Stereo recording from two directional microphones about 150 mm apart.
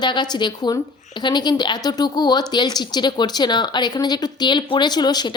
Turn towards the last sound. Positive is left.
turn(degrees=30)  # may be behind; listen again after turning